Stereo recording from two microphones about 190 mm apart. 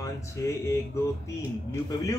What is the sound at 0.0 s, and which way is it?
Speech, 15° left (ahead or behind).